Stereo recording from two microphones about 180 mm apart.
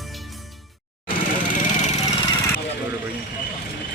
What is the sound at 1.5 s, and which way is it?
Vehicle, 40° left (ahead or behind).